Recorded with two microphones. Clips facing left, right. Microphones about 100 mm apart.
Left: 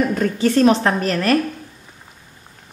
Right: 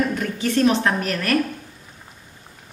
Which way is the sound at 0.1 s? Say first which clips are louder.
Left 5 dB; 35° left (ahead or behind).